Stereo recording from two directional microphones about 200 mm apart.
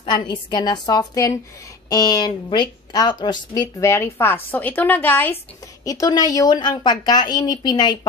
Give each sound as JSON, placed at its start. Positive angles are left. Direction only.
{"t": 0.0, "sound": "a woman's voice", "side_deg": 25}